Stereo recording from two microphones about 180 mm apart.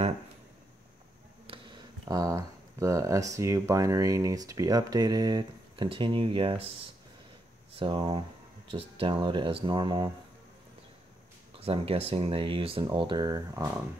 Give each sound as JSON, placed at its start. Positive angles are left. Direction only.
{"t": 1.5, "sound": "speech", "side_deg": -25}
{"t": 7.7, "sound": "speech", "side_deg": -30}
{"t": 11.6, "sound": "speech", "side_deg": -30}